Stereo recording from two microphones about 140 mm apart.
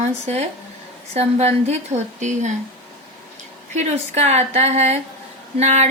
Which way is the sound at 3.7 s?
50° right (ahead or behind).